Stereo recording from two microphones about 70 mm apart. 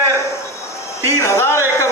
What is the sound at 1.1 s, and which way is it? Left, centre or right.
Speech, left.